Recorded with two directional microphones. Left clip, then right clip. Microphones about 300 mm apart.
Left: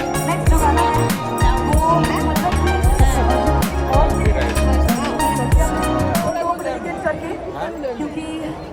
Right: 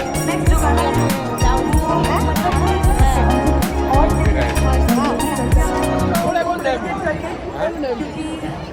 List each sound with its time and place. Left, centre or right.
0.9 s music: centre